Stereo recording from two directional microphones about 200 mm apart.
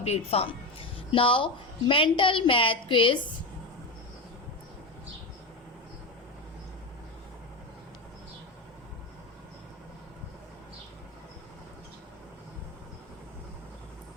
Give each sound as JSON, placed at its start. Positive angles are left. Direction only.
{"t": 0.0, "sound": "a woman's voice", "side_deg": 30}